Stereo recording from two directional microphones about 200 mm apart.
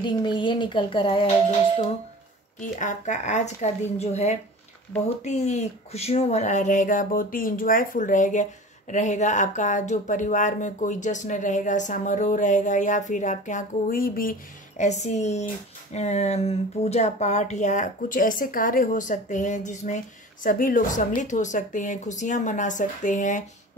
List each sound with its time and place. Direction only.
0.0 s speech: 25° left (ahead or behind)
2.6 s speech: 40° left (ahead or behind)
14.8 s speech: 35° left (ahead or behind)